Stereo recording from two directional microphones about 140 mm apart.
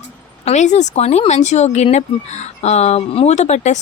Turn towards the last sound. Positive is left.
turn(degrees=55)  # may be behind; listen again after turning